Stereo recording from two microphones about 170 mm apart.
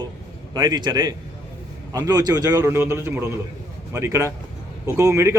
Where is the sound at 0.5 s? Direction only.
25° right (ahead or behind).